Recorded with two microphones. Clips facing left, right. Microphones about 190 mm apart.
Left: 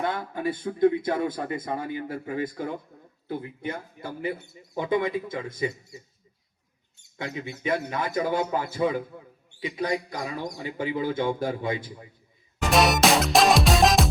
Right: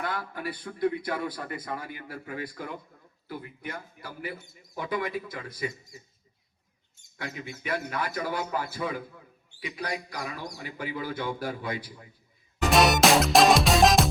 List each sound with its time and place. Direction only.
0.0 s a man's voice: 25° left (ahead or behind)
7.2 s a man's voice: 25° left (ahead or behind)
12.6 s music: centre (ahead or behind)